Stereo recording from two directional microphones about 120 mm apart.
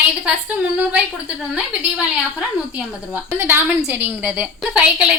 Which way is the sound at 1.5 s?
10° right (ahead or behind).